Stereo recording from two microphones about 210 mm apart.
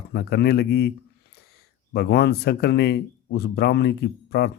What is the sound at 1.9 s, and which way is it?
Speech, 50° left (ahead or behind).